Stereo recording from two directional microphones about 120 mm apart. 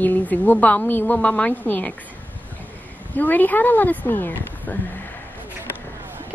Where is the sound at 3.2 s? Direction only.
15° left (ahead or behind).